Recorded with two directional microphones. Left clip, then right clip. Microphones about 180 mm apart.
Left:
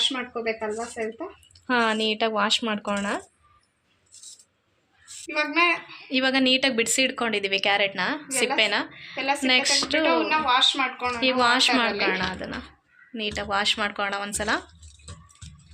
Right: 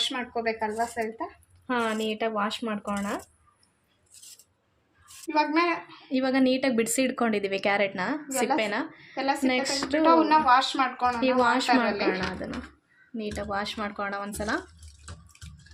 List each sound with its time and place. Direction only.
0.1 s speech: 10° left (ahead or behind)
5.2 s a woman's voice: 40° right (ahead or behind)
6.1 s a woman's voice: 10° right (ahead or behind)